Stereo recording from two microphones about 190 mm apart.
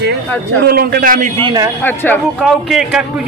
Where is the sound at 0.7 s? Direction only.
50° right (ahead or behind).